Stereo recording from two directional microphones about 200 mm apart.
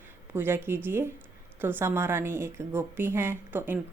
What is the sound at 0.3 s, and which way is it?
Speech, 10° right (ahead or behind).